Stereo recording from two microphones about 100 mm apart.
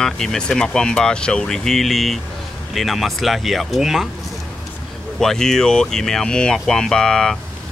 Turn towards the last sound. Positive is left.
turn(degrees=10)  # may be behind; listen again after turning